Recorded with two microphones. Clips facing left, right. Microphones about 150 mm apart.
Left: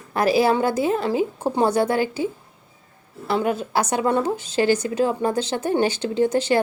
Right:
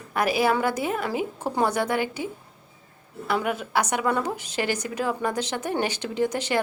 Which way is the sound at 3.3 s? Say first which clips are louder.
Left 4 dB; 30° left (ahead or behind).